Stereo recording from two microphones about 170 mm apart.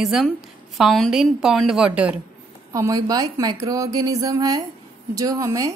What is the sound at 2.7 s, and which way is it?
A woman's voice, 20° right (ahead or behind).